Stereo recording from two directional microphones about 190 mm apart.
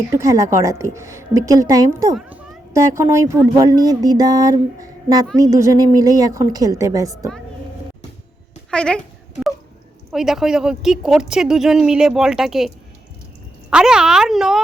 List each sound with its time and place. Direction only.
0.1 s a woman's voice: 15° right (ahead or behind)
3.6 s a sound: 20° right (ahead or behind)
5.4 s a woman's voice: 15° right (ahead or behind)
8.7 s speech: 5° left (ahead or behind)
10.1 s speech: centre (ahead or behind)